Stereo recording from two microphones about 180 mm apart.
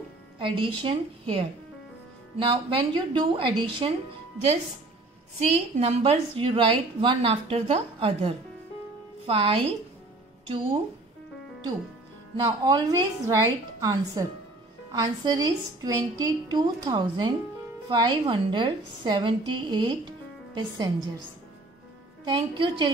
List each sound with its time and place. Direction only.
0.4 s a woman's voice: 25° right (ahead or behind)
5.4 s a woman's voice: 35° right (ahead or behind)
12.4 s a woman's voice: 20° right (ahead or behind)
22.2 s a woman's voice: 25° right (ahead or behind)